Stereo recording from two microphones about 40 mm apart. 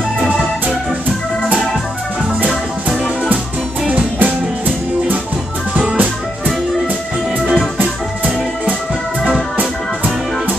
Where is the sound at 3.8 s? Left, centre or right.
Right.